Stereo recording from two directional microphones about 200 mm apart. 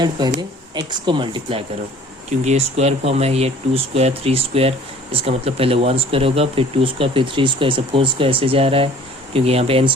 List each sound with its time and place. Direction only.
0.2 s speech: 20° right (ahead or behind)